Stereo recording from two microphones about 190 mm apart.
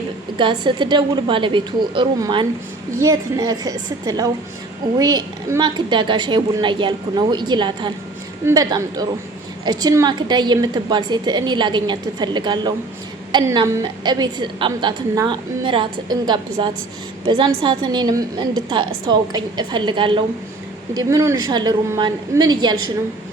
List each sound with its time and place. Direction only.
0.3 s a woman's voice: 25° right (ahead or behind)